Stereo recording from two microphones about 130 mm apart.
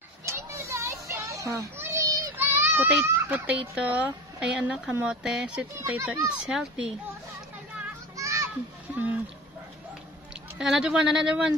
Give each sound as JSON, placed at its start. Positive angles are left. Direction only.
{"t": 0.2, "sound": "children playing", "side_deg": -20}
{"t": 4.9, "sound": "a child's voice", "side_deg": -10}
{"t": 8.2, "sound": "children playing", "side_deg": -25}
{"t": 8.9, "sound": "a child's voice", "side_deg": -15}
{"t": 10.6, "sound": "a child's voice", "side_deg": -5}